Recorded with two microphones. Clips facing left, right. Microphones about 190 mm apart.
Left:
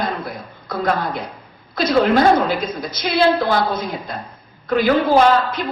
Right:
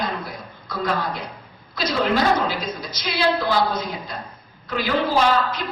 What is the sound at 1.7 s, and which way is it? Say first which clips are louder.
A woman's voice: left 6 dB; 55° left (ahead or behind).